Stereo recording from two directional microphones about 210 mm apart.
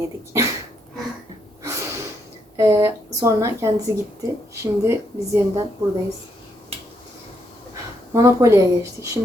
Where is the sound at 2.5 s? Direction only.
15° right (ahead or behind).